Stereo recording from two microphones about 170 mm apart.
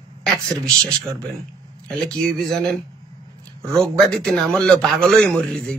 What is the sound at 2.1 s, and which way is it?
A man's voice, 5° left (ahead or behind).